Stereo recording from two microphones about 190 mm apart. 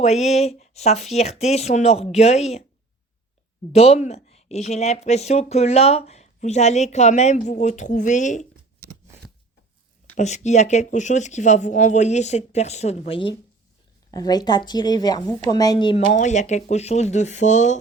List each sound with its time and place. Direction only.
0.0 s a woman's voice: 35° left (ahead or behind)
3.7 s a woman's voice: 35° left (ahead or behind)
10.2 s a woman's voice: 35° left (ahead or behind)
16.0 s a woman's voice: 40° left (ahead or behind)